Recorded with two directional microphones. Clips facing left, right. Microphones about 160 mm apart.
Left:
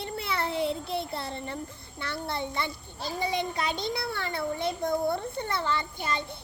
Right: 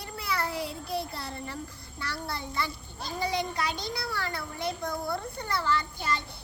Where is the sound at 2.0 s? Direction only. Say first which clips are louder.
Left 3 dB; 25° left (ahead or behind).